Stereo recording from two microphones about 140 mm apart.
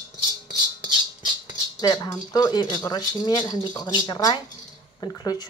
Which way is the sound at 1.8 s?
30° left (ahead or behind).